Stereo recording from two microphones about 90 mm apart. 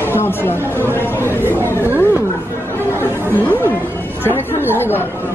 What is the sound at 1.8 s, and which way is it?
Speech, 20° right (ahead or behind).